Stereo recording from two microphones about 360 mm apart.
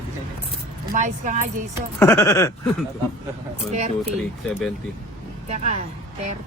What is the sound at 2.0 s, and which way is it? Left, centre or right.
Speech, centre.